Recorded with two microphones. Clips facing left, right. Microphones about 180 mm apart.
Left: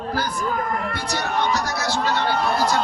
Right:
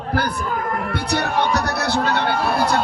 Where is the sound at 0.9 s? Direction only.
60° right (ahead or behind).